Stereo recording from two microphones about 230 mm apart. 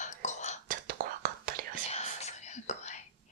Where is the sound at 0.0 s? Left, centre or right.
Left.